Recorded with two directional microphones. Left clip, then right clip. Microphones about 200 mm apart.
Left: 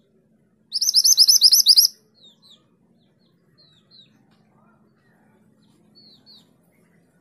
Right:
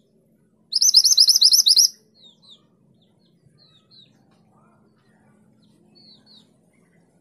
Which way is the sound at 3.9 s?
20° left (ahead or behind).